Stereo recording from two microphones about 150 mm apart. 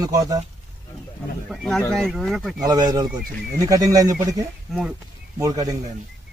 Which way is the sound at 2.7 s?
25° right (ahead or behind).